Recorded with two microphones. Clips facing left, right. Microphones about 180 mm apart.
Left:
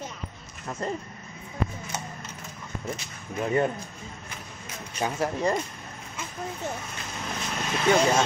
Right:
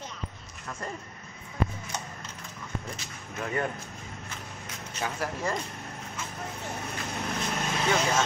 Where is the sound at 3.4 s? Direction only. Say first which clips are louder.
Left 6 dB; 25° left (ahead or behind).